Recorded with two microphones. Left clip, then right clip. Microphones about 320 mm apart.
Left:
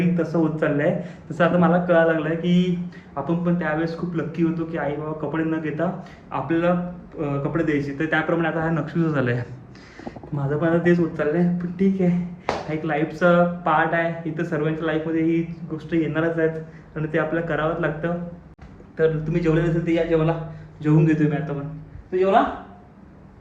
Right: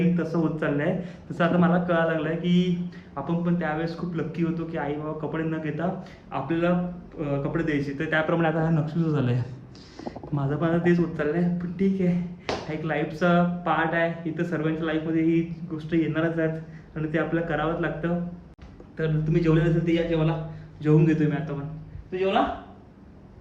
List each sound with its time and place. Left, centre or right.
0.2 s speech: centre
8.4 s speech: right
8.9 s speech: centre